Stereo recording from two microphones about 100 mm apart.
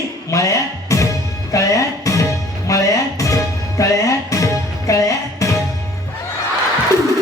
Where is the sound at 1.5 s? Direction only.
35° left (ahead or behind).